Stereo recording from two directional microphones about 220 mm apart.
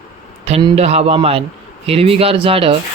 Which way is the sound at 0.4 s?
30° right (ahead or behind).